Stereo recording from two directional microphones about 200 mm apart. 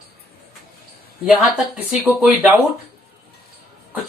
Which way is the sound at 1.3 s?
Centre (ahead or behind).